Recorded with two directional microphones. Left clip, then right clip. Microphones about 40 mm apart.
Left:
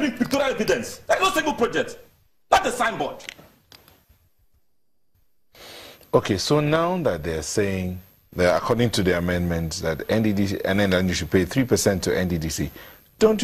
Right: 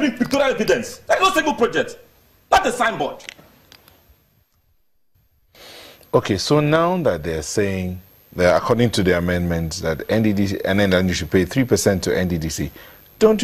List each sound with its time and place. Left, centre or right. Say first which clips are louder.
0.0 s a man's voice: right 4 dB; right
2.5 s dog: right 3 dB; right
5.5 s speech: right 1 dB; right